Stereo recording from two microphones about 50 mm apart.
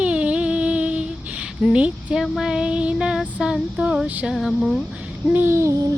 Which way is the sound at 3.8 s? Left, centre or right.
Right.